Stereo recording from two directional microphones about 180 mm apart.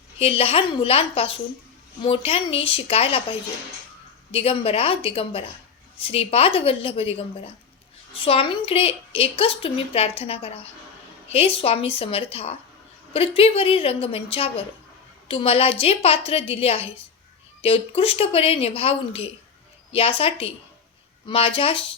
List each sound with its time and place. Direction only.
0.2 s a woman's voice: 30° left (ahead or behind)